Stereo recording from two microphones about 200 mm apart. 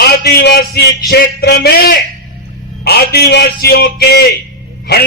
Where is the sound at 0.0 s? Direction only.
55° left (ahead or behind).